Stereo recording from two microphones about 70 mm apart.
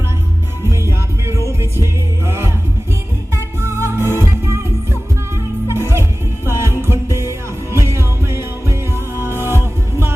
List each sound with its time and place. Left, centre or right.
0.7 s music: right
5.6 s music: right